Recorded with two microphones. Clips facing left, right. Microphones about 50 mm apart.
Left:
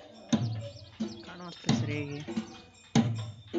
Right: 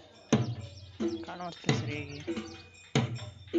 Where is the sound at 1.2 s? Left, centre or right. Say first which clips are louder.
Right 5 dB; right.